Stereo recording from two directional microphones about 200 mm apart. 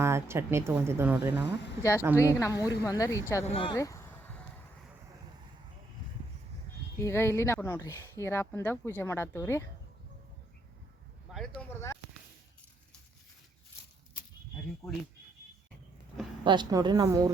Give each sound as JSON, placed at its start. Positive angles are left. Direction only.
{"t": 0.0, "sound": "speech", "side_deg": -15}
{"t": 2.1, "sound": "speech", "side_deg": 15}
{"t": 3.4, "sound": "speech", "side_deg": 25}
{"t": 3.8, "sound": "a sound", "side_deg": 15}
{"t": 7.0, "sound": "speech", "side_deg": 10}
{"t": 11.3, "sound": "a sound", "side_deg": 0}
{"t": 11.7, "sound": "speech", "side_deg": 15}
{"t": 14.8, "sound": "speech", "side_deg": 15}
{"t": 16.4, "sound": "a woman's voice", "side_deg": -20}